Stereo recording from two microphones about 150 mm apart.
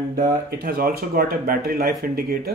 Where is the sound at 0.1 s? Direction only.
80° right.